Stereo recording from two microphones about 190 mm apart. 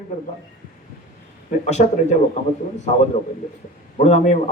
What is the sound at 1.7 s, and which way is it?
Speech, 35° left (ahead or behind).